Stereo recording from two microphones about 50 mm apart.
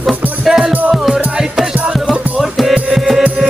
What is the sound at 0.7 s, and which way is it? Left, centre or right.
Music, right.